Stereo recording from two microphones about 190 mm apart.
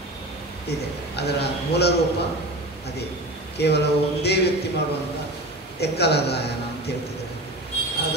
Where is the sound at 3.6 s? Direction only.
60° left (ahead or behind).